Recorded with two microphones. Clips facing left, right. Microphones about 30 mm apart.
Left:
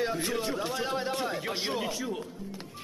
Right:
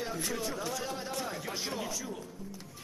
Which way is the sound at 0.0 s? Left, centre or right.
Left.